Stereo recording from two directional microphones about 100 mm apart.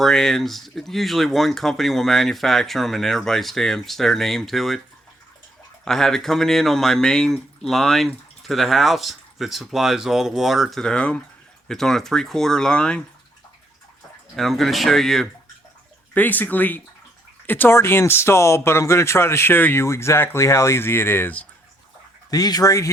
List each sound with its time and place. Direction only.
0.0 s speech: 5° left (ahead or behind)
5.8 s speech: 5° left (ahead or behind)
14.3 s speech: centre (ahead or behind)
16.1 s speech: 15° left (ahead or behind)
22.3 s speech: 40° left (ahead or behind)